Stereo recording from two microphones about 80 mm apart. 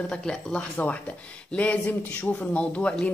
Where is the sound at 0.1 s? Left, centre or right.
Centre.